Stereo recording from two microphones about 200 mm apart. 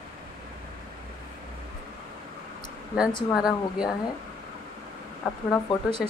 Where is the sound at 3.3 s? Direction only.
Centre (ahead or behind).